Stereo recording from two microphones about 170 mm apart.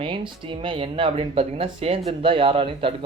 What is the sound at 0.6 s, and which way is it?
Speech, 30° right (ahead or behind).